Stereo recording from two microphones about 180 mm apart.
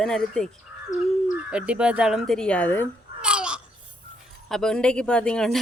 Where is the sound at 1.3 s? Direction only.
5° right (ahead or behind).